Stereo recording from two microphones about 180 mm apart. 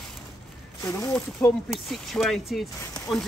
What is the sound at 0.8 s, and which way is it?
Speech, 15° left (ahead or behind).